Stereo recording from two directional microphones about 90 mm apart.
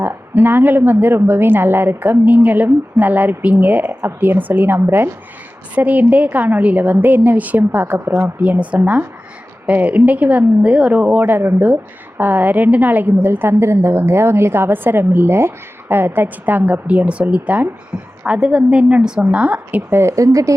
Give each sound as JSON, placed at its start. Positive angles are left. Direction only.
{"t": 0.0, "sound": "a woman's voice", "side_deg": -25}
{"t": 8.4, "sound": "a woman's voice", "side_deg": -15}
{"t": 20.0, "sound": "speech", "side_deg": -35}